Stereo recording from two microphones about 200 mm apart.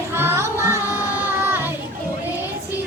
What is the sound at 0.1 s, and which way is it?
Music, 10° right (ahead or behind).